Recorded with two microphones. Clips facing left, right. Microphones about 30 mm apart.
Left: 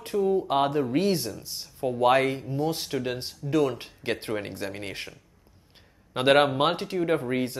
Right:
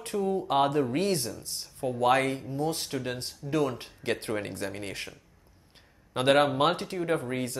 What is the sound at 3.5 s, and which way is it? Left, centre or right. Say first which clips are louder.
Speech: left 4 dB; centre.